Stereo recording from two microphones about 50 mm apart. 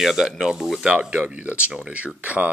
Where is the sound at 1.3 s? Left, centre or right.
Right.